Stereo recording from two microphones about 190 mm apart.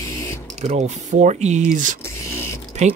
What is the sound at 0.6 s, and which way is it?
Speech, 35° right (ahead or behind).